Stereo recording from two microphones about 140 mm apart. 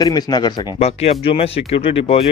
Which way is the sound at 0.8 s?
45° left (ahead or behind).